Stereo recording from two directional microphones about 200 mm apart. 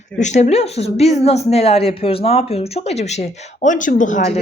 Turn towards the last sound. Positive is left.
turn(degrees=35)  # may be behind; listen again after turning